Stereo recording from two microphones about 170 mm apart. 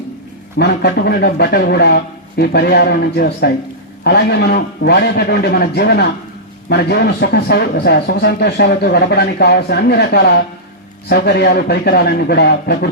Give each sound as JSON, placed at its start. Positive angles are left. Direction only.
{"t": 0.6, "sound": "a man's voice", "side_deg": 80}